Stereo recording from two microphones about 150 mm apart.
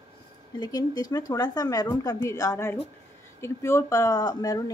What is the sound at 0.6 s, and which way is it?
Speech, 25° left (ahead or behind).